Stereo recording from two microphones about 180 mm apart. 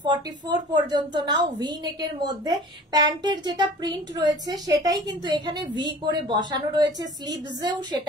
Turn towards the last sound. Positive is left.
turn(degrees=-25)  # may be behind; listen again after turning